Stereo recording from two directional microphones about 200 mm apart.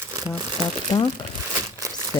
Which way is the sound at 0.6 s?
20° left (ahead or behind).